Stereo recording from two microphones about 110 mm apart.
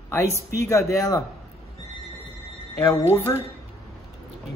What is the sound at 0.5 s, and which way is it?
Speech, 25° left (ahead or behind).